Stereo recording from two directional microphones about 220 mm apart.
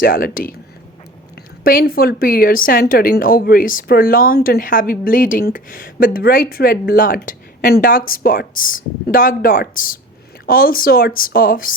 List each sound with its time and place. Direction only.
0.0 s a woman's voice: 40° left (ahead or behind)
1.6 s a woman's voice: 40° left (ahead or behind)